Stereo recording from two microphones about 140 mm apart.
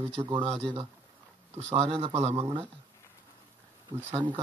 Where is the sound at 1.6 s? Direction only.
45° right (ahead or behind).